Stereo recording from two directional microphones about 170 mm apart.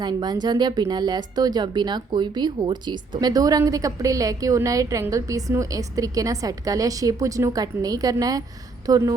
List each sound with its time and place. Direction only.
0.0 s speech: 25° right (ahead or behind)